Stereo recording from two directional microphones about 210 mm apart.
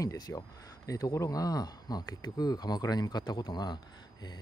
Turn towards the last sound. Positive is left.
turn(degrees=20)  # may be behind; listen again after turning